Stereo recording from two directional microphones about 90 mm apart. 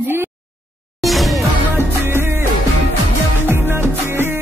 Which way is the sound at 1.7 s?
25° right (ahead or behind).